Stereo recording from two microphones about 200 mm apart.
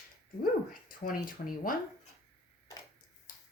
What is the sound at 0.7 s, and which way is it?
Speech, 45° left (ahead or behind).